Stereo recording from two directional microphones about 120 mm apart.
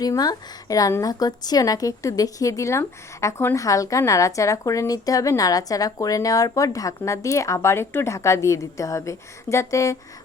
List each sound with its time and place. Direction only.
0.0 s a woman's voice: 35° left (ahead or behind)